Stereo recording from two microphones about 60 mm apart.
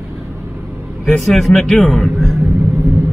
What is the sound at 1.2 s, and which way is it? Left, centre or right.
A man's voice, centre.